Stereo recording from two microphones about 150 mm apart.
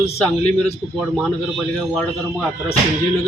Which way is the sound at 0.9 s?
Centre (ahead or behind).